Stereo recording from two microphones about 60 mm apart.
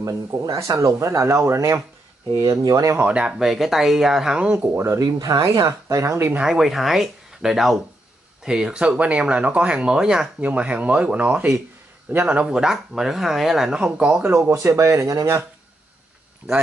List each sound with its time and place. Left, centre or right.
0.0 s speech: right
2.4 s speech: right
3.1 s speech: centre
4.7 s speech: right
5.0 s speech: right
6.4 s speech: centre
10.4 s speech: right
12.1 s a man's voice: right
12.4 s speech: centre
14.5 s speech: right